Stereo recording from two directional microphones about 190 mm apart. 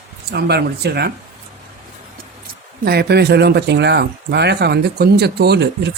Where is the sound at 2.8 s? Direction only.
60° right (ahead or behind).